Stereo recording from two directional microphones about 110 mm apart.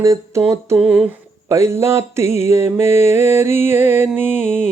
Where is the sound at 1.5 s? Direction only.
25° right (ahead or behind).